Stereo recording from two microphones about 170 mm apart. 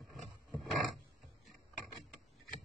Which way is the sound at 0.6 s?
Centre (ahead or behind).